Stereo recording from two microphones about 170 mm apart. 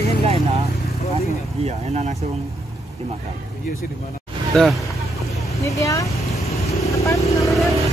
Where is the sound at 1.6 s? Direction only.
40° right (ahead or behind).